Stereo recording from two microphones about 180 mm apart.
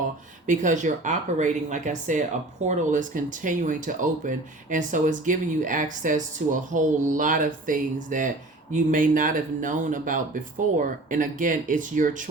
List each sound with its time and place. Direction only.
0.4 s speech: 45° right (ahead or behind)